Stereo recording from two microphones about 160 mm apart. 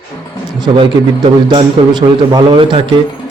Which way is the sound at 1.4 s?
25° right (ahead or behind).